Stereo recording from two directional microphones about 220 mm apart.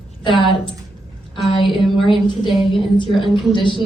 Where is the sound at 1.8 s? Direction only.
Centre (ahead or behind).